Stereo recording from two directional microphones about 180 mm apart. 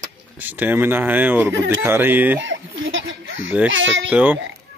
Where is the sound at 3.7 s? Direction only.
90° right.